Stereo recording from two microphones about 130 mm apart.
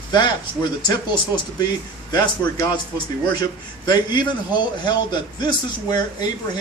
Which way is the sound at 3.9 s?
35° left (ahead or behind).